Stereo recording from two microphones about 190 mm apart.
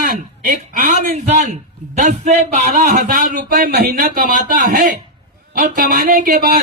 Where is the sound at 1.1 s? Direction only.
35° right (ahead or behind).